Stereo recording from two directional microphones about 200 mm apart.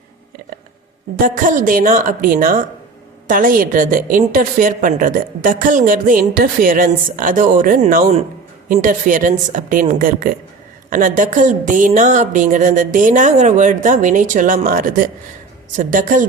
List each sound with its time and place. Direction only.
1.2 s a woman's voice: 40° right (ahead or behind)